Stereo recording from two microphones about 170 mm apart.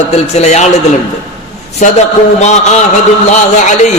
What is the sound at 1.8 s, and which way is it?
A man's voice, 45° left (ahead or behind).